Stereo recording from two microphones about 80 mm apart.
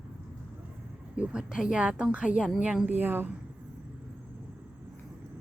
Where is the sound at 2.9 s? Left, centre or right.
Right.